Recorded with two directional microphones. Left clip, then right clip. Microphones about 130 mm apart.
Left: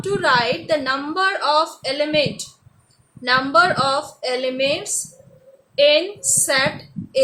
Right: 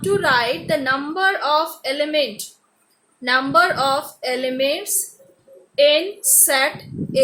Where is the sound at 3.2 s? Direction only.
5° right (ahead or behind).